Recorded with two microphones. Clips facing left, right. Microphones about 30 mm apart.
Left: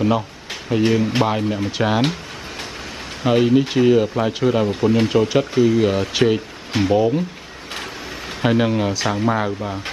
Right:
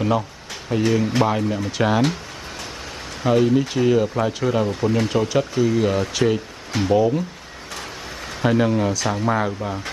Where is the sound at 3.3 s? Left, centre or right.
Left.